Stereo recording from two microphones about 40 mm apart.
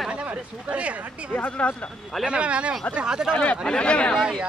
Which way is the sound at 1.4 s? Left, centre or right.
Left.